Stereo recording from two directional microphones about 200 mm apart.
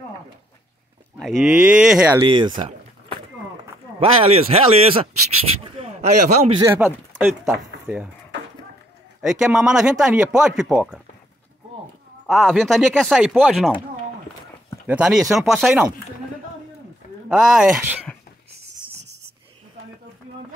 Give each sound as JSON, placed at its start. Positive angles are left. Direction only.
{"t": 1.1, "sound": "speech", "side_deg": 0}
{"t": 2.1, "sound": "speech", "side_deg": -20}
{"t": 4.0, "sound": "a man's voice", "side_deg": -30}
{"t": 6.6, "sound": "speech", "side_deg": -10}
{"t": 9.4, "sound": "speech", "side_deg": -5}
{"t": 12.3, "sound": "speech", "side_deg": 0}
{"t": 14.9, "sound": "speech", "side_deg": -5}
{"t": 17.3, "sound": "speech", "side_deg": -5}